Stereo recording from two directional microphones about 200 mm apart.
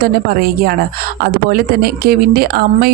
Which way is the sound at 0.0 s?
50° right (ahead or behind).